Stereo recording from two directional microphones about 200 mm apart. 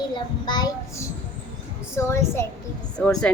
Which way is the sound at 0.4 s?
20° left (ahead or behind).